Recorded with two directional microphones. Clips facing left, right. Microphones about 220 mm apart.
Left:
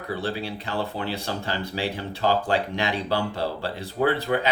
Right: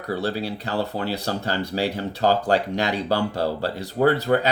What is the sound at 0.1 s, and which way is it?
Speech, 40° right (ahead or behind).